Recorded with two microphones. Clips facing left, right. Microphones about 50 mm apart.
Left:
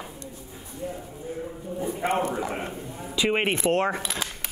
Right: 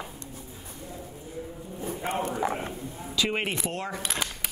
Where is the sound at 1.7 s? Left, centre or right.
Left.